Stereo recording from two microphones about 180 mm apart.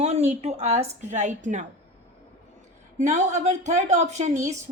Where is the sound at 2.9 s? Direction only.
40° right (ahead or behind).